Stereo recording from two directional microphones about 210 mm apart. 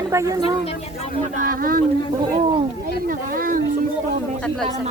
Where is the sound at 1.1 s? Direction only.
40° right (ahead or behind).